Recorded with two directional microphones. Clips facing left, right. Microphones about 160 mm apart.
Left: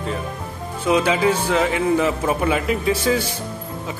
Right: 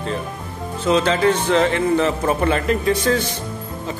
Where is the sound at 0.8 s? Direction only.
10° left (ahead or behind).